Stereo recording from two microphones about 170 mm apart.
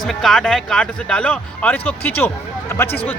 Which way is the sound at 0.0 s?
Centre (ahead or behind).